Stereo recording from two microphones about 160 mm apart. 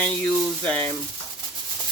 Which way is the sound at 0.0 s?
10° left (ahead or behind).